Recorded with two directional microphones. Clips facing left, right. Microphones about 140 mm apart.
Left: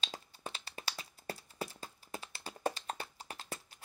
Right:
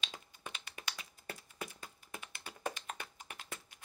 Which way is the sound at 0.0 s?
35° left (ahead or behind).